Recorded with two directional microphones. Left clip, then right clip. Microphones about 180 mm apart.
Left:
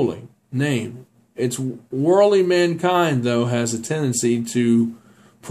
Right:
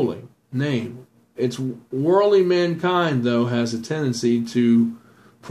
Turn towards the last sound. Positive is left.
turn(degrees=25)  # may be behind; listen again after turning